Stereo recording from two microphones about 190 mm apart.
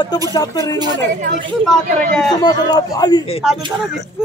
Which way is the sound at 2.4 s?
20° left (ahead or behind).